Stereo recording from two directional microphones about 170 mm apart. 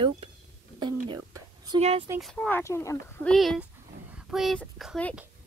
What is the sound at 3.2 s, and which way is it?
Speech, 5° left (ahead or behind).